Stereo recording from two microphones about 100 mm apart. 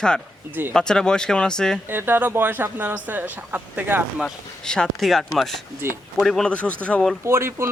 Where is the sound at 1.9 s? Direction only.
20° right (ahead or behind).